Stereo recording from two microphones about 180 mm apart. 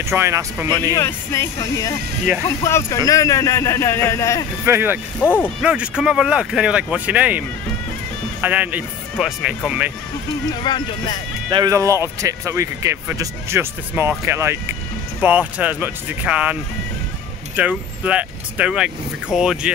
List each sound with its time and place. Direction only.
0.0 s speech: 15° right (ahead or behind)
0.7 s a man's voice: 15° left (ahead or behind)
4.6 s speech: 10° right (ahead or behind)
5.2 s a man's voice: 10° left (ahead or behind)
5.6 s speech: 5° right (ahead or behind)
10.6 s speech: 25° left (ahead or behind)
11.5 s speech: 20° right (ahead or behind)
17.6 s speech: 5° right (ahead or behind)